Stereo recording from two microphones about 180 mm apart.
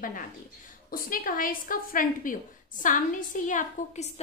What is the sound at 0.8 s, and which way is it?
A woman's voice, 55° left (ahead or behind).